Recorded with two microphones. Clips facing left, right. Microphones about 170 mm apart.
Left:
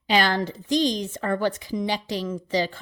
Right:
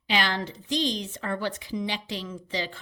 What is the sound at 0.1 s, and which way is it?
A woman's voice, 45° left (ahead or behind).